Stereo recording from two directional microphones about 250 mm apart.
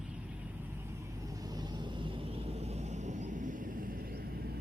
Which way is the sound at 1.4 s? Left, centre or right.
Centre.